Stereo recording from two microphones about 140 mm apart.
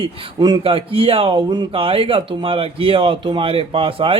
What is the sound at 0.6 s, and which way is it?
A man's voice, 40° right (ahead or behind).